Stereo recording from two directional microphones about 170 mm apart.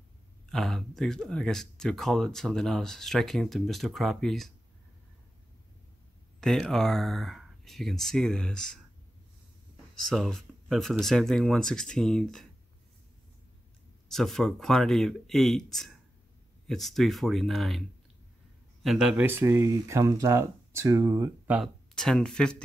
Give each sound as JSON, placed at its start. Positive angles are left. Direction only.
{"t": 0.5, "sound": "speech", "side_deg": 0}
{"t": 6.4, "sound": "speech", "side_deg": 0}
{"t": 9.9, "sound": "speech", "side_deg": 0}
{"t": 14.0, "sound": "speech", "side_deg": 0}
{"t": 21.9, "sound": "speech", "side_deg": 5}